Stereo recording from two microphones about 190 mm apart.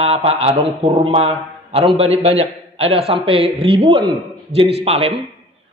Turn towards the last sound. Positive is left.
turn(degrees=-30)  # may be behind; listen again after turning